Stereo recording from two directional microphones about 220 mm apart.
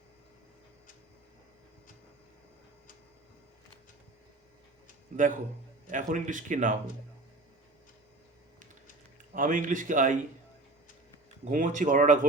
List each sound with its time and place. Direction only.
5.1 s speech: 35° right (ahead or behind)
9.3 s speech: 35° right (ahead or behind)
11.4 s speech: 35° right (ahead or behind)